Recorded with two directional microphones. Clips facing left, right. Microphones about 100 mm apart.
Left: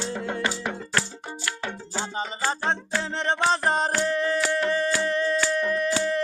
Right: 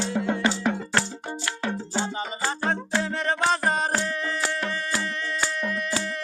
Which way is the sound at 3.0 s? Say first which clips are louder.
Left 2 dB; 25° left (ahead or behind).